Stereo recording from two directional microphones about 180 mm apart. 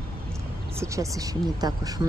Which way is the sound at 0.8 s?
15° right (ahead or behind).